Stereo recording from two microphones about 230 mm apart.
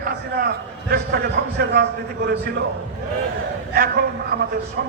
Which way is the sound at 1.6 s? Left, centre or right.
Right.